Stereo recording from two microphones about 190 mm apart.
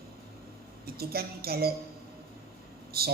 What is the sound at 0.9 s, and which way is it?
Speech, 55° right (ahead or behind).